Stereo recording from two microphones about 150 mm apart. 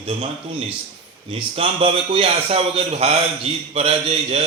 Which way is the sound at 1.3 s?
35° right (ahead or behind).